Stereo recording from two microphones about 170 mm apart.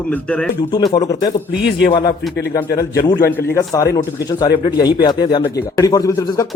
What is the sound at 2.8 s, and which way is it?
Speech, 20° left (ahead or behind).